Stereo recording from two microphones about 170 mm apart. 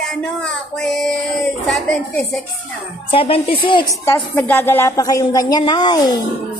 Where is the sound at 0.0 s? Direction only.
5° left (ahead or behind).